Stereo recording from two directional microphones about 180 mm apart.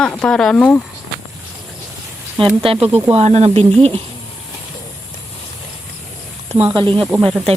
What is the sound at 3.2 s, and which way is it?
Speech, 35° right (ahead or behind).